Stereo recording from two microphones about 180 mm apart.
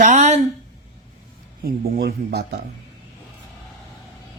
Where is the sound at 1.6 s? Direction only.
55° right (ahead or behind).